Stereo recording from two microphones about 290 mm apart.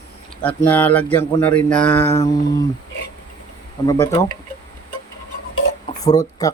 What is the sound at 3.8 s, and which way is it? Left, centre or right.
Speech, centre.